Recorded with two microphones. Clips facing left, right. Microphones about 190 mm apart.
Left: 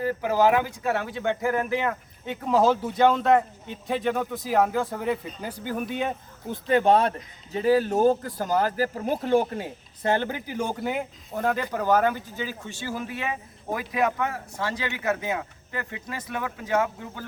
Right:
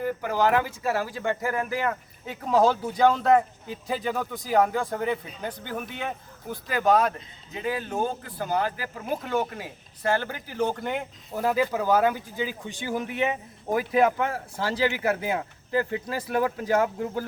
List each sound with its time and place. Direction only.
0.0 s speech: 5° left (ahead or behind)
6.5 s a man's voice: 25° left (ahead or behind); by 17.2 s 35° right (ahead or behind)